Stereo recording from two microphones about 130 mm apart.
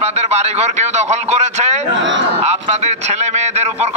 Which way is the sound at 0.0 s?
55° right (ahead or behind).